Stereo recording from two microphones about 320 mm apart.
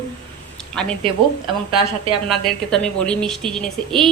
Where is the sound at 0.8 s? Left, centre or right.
Centre.